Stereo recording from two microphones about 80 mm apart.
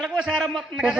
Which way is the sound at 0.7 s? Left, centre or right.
Centre.